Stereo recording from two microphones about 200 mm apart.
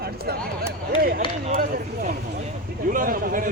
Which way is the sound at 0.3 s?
50° right (ahead or behind).